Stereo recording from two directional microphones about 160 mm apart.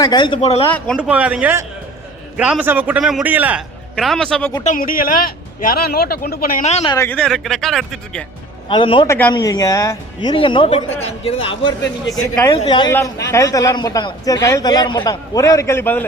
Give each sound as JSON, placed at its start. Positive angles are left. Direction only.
{"t": 0.0, "sound": "a man's voice", "side_deg": 25}
{"t": 0.4, "sound": "a man's voice", "side_deg": 40}
{"t": 0.9, "sound": "a man's voice", "side_deg": -5}
{"t": 3.9, "sound": "speech", "side_deg": 5}
{"t": 4.6, "sound": "a man's voice", "side_deg": 55}
{"t": 6.8, "sound": "a man's voice", "side_deg": 20}
{"t": 7.2, "sound": "speech", "side_deg": 0}
{"t": 8.7, "sound": "a man's voice", "side_deg": 30}
{"t": 9.0, "sound": "speech", "side_deg": 10}
{"t": 9.3, "sound": "a man's voice", "side_deg": 25}
{"t": 12.6, "sound": "a man's voice", "side_deg": 30}
{"t": 12.9, "sound": "a man's voice", "side_deg": 15}